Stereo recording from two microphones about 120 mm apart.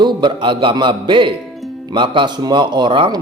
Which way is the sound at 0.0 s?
40° right (ahead or behind).